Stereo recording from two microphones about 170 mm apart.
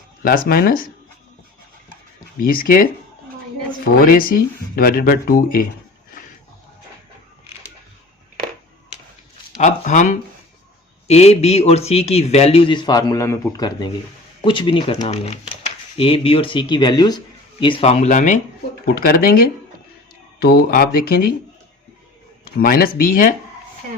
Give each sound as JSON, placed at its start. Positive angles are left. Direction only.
{"t": 0.2, "sound": "speech", "side_deg": 60}
{"t": 2.4, "sound": "speech", "side_deg": 55}
{"t": 4.0, "sound": "speech", "side_deg": 55}
{"t": 9.6, "sound": "a man's voice", "side_deg": 45}
{"t": 18.9, "sound": "speech", "side_deg": 60}
{"t": 22.5, "sound": "speech", "side_deg": 60}